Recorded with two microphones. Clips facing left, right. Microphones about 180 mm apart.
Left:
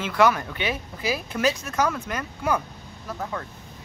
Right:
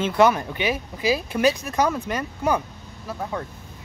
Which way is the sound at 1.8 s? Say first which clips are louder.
Right 3 dB; 30° right (ahead or behind).